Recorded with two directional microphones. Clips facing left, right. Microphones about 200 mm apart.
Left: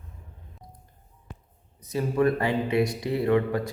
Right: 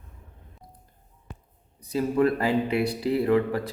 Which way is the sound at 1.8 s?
30° right (ahead or behind).